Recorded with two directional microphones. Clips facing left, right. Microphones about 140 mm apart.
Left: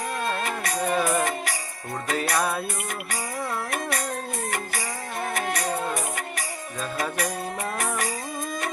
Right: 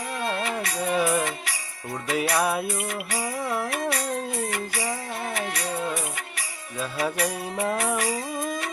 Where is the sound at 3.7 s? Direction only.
45° left (ahead or behind).